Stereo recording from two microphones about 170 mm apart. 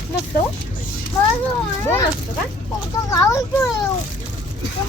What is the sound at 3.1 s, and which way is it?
Speech, 20° left (ahead or behind).